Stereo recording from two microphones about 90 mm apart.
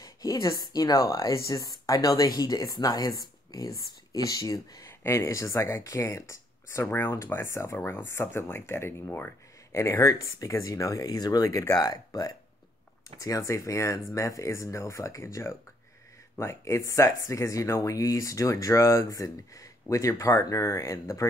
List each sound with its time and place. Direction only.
0.0 s speech: 40° left (ahead or behind)
5.0 s speech: 30° left (ahead or behind)